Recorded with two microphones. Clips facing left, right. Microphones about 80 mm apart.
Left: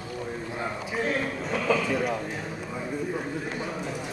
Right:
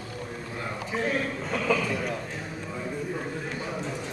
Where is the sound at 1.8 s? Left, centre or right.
Left.